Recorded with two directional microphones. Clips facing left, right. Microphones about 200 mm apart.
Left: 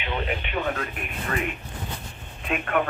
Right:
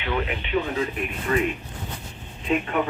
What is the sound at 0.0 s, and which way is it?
Speech, 20° left (ahead or behind).